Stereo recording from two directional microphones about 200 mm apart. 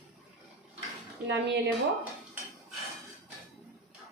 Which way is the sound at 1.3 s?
60° right (ahead or behind).